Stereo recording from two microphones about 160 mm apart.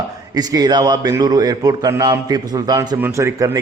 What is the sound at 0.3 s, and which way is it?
A man's voice, 25° right (ahead or behind).